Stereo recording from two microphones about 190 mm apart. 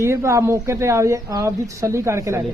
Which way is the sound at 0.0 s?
15° right (ahead or behind).